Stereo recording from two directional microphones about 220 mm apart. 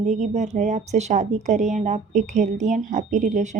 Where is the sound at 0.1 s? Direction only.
30° right (ahead or behind).